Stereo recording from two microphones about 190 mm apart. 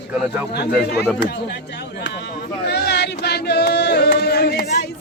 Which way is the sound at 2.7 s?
60° left (ahead or behind).